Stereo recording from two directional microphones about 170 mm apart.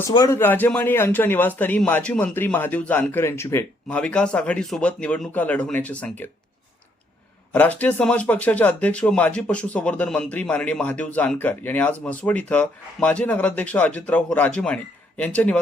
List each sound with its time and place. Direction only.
0.1 s speech: 25° left (ahead or behind)
0.3 s a man's voice: 10° left (ahead or behind)
7.5 s a man's voice: 10° left (ahead or behind)